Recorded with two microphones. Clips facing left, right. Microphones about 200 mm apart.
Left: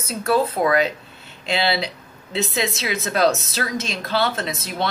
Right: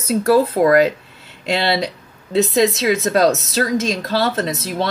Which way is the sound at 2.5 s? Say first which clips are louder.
Right 10 dB; 40° right (ahead or behind).